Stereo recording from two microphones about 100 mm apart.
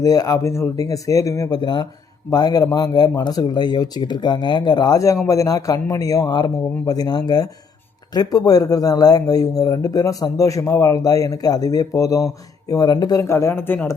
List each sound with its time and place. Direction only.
0.0 s speech: 35° left (ahead or behind)
1.5 s speech: 45° left (ahead or behind)
13.2 s speech: 25° left (ahead or behind)